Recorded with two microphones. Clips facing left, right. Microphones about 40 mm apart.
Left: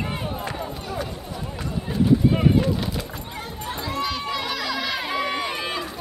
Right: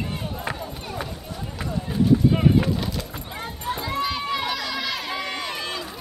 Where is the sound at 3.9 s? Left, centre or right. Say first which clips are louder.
Even; centre.